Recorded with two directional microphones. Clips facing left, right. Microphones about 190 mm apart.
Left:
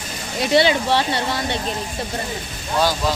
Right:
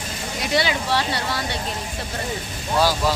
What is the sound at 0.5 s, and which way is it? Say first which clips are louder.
Speech: left 5 dB; 25° left (ahead or behind).